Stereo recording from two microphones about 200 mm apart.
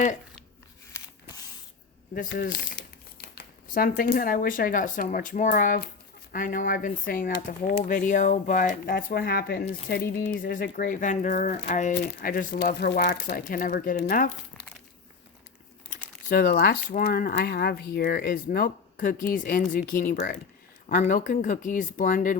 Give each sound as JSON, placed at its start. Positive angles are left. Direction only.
{"t": 2.3, "sound": "speech", "side_deg": 55}
{"t": 11.9, "sound": "speech", "side_deg": 50}
{"t": 15.9, "sound": "speech", "side_deg": 50}